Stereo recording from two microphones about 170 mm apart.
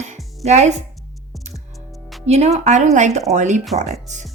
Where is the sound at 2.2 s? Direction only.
40° right (ahead or behind).